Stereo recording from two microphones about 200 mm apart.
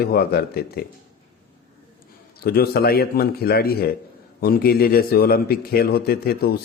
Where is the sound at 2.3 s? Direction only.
50° left (ahead or behind).